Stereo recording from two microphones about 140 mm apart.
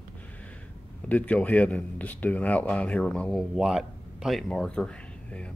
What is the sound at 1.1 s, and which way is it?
Speech, 10° left (ahead or behind).